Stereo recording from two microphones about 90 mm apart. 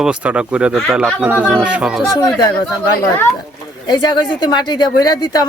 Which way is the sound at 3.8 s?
55° left (ahead or behind).